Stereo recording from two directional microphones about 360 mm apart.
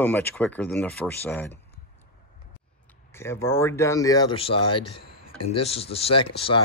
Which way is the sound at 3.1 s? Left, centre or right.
Centre.